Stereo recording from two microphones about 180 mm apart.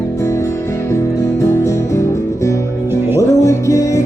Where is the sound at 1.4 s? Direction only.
15° left (ahead or behind).